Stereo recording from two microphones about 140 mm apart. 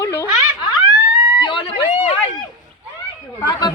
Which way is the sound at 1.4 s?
35° left (ahead or behind).